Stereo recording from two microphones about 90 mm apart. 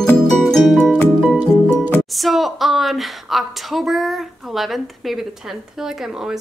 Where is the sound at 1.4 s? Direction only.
20° right (ahead or behind).